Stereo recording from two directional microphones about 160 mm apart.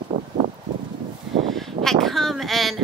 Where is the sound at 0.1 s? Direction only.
45° right (ahead or behind).